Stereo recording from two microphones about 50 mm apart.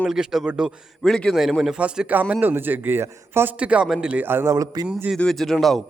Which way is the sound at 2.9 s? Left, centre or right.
Right.